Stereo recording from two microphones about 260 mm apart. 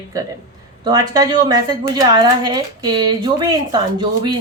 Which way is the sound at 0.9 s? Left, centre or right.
Centre.